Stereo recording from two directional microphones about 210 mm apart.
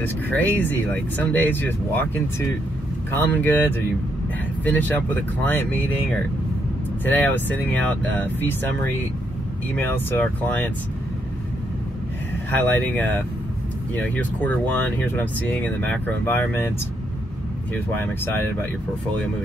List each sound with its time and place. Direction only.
0.0 s speech: 10° left (ahead or behind)
9.8 s speech: 10° left (ahead or behind)
12.4 s speech: 5° left (ahead or behind)
17.7 s speech: 10° left (ahead or behind)